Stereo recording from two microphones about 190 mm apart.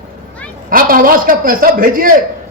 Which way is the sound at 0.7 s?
45° right (ahead or behind).